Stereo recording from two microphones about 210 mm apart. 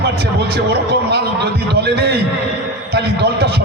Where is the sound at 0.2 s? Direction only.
50° right (ahead or behind).